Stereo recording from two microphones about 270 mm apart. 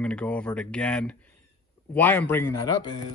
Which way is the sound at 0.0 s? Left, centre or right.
Centre.